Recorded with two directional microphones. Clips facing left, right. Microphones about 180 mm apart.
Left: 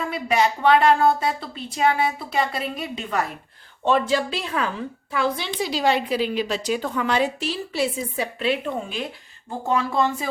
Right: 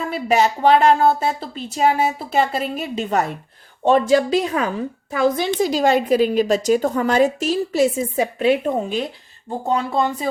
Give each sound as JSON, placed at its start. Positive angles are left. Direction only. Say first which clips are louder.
{"t": 0.3, "sound": "a woman's voice", "louder": "right 3 dB", "side_deg": -40}